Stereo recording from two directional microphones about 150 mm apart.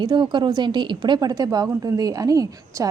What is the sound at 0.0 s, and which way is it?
A woman's voice, 30° right (ahead or behind).